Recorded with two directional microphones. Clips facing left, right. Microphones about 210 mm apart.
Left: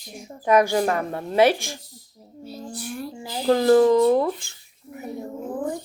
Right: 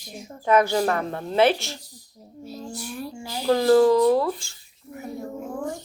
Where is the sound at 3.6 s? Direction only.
20° left (ahead or behind).